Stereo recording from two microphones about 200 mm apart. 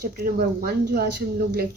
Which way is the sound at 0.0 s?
45° right (ahead or behind).